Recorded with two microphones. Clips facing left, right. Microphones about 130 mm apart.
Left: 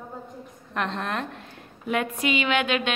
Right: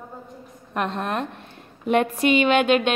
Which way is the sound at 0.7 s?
15° right (ahead or behind).